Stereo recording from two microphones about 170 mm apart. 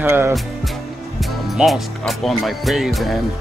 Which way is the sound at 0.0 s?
15° right (ahead or behind).